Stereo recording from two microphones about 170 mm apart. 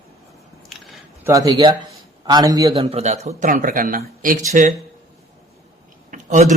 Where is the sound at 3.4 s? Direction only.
50° right (ahead or behind).